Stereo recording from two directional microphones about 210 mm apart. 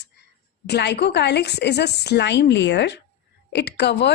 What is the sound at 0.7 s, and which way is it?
A woman's voice, 55° left (ahead or behind).